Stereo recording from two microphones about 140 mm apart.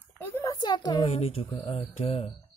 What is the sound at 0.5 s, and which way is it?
A woman's voice, 30° left (ahead or behind).